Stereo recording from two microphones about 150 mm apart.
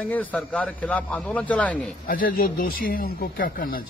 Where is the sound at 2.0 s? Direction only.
75° left (ahead or behind).